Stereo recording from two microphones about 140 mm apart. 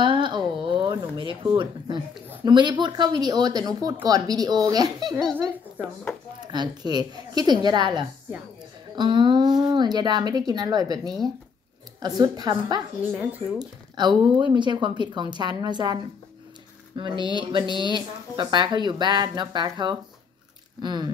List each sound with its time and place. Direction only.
0.0 s a sound: 35° right (ahead or behind)
2.4 s speech: 30° right (ahead or behind)
5.8 s speech: 15° right (ahead or behind)
6.4 s speech: 30° right (ahead or behind)
13.1 s speech: 10° right (ahead or behind)
13.6 s speech: 30° right (ahead or behind)